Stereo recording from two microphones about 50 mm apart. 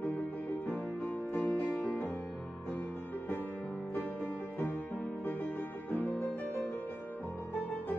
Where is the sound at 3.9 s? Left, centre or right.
Left.